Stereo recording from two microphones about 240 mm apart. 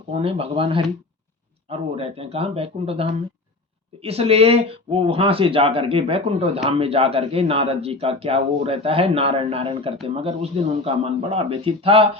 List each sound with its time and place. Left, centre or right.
0.1 s speech: right